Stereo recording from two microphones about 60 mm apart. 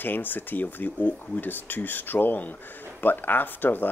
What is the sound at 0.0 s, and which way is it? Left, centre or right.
Speech, left.